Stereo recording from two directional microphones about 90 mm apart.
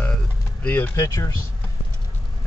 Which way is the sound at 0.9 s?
35° left (ahead or behind).